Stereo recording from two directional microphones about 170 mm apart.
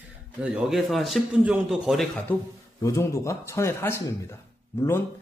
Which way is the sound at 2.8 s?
20° left (ahead or behind).